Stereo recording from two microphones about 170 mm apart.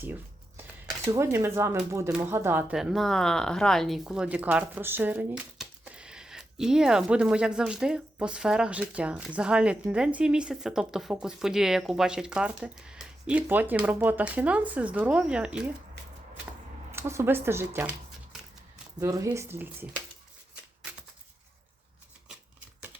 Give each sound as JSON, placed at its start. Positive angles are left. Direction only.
{"t": 0.0, "sound": "shuffling cards", "side_deg": -10}
{"t": 1.1, "sound": "speech", "side_deg": -15}
{"t": 16.9, "sound": "speech", "side_deg": -15}
{"t": 18.9, "sound": "speech", "side_deg": -20}